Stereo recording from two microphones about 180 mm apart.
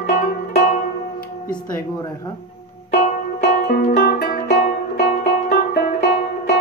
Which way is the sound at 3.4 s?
55° left (ahead or behind).